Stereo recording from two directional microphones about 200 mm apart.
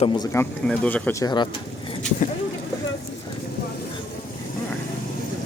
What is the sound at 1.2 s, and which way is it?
Speech, 20° left (ahead or behind).